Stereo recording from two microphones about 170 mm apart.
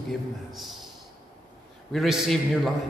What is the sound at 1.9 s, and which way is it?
Speech, centre (ahead or behind).